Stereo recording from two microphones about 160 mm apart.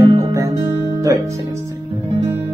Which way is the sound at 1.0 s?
20° right (ahead or behind).